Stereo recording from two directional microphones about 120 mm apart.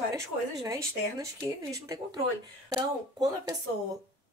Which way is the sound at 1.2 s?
30° right (ahead or behind).